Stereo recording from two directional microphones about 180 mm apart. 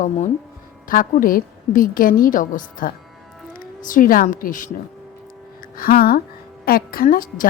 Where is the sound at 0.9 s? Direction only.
50° left (ahead or behind).